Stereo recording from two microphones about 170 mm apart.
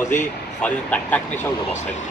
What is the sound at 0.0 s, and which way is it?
Speech, 45° left (ahead or behind).